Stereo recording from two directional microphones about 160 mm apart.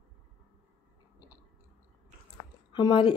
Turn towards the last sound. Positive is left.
turn(degrees=25)  # may be behind; listen again after turning